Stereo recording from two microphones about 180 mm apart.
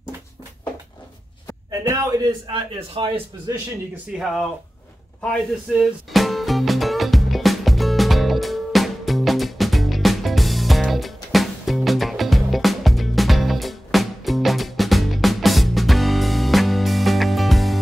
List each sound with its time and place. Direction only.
1.7 s a man's voice: 20° right (ahead or behind)
3.9 s speech: centre (ahead or behind)
5.8 s music: centre (ahead or behind)